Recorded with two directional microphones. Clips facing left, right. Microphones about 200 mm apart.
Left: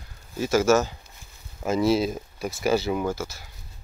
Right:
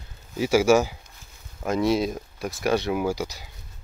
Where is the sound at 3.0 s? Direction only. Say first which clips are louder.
Right 2 dB; 15° right (ahead or behind).